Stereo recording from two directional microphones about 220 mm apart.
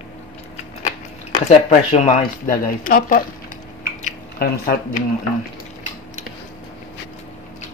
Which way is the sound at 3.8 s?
45° left (ahead or behind).